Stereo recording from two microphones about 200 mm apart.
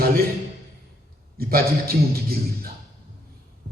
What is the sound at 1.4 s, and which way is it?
A man's voice, 50° right (ahead or behind).